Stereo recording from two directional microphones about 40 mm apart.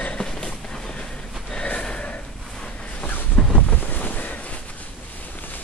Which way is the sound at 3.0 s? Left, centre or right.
Left.